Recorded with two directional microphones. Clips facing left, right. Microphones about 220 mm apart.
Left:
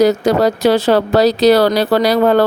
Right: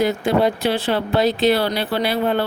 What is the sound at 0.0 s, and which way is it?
Speech, 40° left (ahead or behind).